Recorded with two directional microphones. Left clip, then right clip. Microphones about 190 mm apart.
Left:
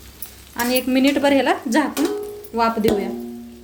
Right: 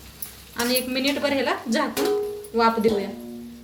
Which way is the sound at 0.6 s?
50° left (ahead or behind).